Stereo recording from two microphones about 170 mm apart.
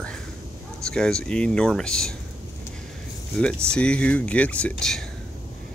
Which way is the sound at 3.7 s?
5° left (ahead or behind).